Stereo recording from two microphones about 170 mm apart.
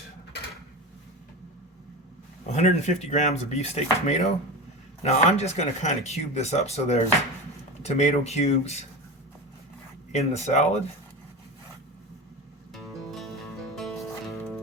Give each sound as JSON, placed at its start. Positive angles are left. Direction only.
{"t": 2.5, "sound": "speech", "side_deg": 40}
{"t": 10.1, "sound": "speech", "side_deg": 40}
{"t": 13.0, "sound": "music", "side_deg": 0}